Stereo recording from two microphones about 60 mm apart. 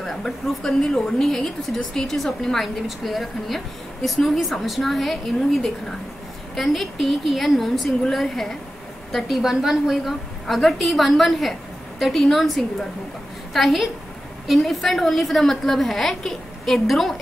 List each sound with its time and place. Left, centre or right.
0.0 s a woman's voice: centre